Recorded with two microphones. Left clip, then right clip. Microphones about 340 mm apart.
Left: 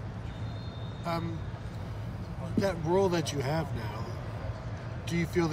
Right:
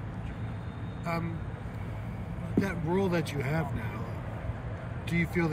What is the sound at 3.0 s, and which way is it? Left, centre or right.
Speech, left.